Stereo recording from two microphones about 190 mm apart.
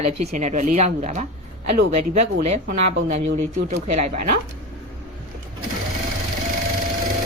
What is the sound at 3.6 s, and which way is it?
Speech, 35° right (ahead or behind).